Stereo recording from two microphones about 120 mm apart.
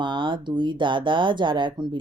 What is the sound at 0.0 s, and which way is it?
Speech, 40° right (ahead or behind).